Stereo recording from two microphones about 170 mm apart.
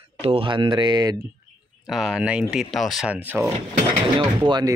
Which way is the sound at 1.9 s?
Centre (ahead or behind).